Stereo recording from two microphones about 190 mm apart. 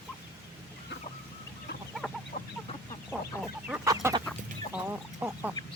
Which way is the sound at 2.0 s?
5° left (ahead or behind).